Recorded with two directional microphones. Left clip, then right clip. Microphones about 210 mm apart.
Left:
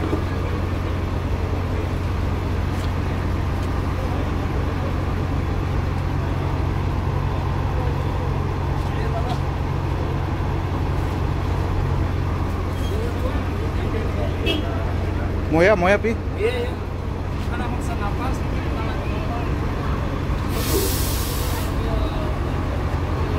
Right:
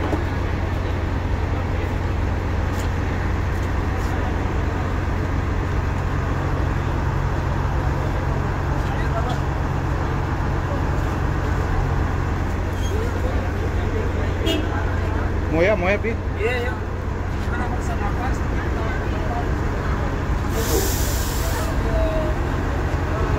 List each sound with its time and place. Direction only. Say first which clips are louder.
15.5 s vehicle: left 3 dB; 35° left (ahead or behind)